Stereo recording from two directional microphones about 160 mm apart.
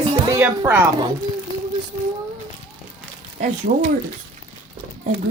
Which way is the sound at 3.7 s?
55° right (ahead or behind).